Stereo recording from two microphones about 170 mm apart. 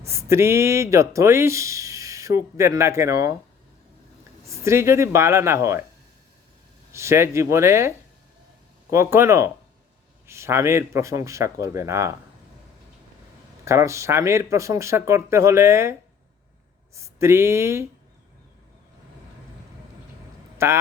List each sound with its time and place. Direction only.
0.0 s speech: 15° right (ahead or behind)
4.4 s speech: 15° right (ahead or behind)
6.9 s speech: 15° right (ahead or behind)
13.7 s speech: 15° right (ahead or behind)
20.6 s speech: 15° right (ahead or behind)